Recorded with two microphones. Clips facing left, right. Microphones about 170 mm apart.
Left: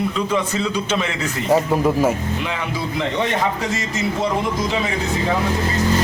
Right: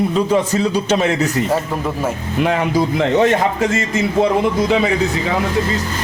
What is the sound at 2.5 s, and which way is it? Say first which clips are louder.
A man's voice: right 9 dB; 50° right (ahead or behind).